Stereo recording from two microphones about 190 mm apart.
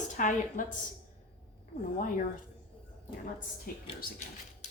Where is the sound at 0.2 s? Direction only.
40° left (ahead or behind).